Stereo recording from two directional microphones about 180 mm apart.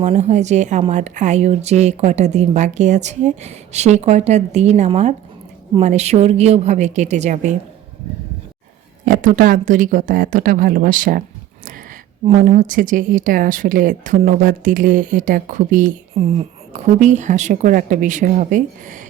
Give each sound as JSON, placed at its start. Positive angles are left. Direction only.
{"t": 0.0, "sound": "speech", "side_deg": -35}
{"t": 9.0, "sound": "speech", "side_deg": -45}
{"t": 12.3, "sound": "speech", "side_deg": -50}